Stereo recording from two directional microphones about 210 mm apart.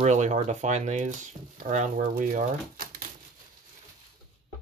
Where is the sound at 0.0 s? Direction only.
35° right (ahead or behind).